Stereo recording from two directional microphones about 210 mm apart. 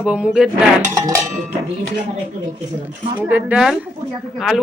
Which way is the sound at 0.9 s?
15° right (ahead or behind).